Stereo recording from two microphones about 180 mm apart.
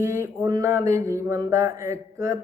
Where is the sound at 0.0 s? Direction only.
15° right (ahead or behind).